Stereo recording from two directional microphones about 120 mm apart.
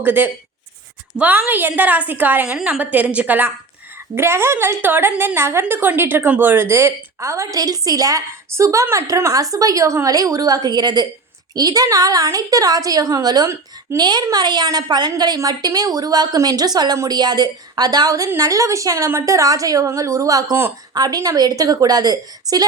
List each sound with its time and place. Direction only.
0.0 s a woman's voice: 15° right (ahead or behind); by 22.6 s 30° right (ahead or behind)